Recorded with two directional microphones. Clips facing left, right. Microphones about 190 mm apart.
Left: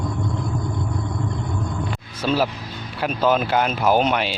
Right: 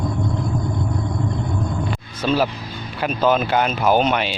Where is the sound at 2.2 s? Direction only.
5° left (ahead or behind).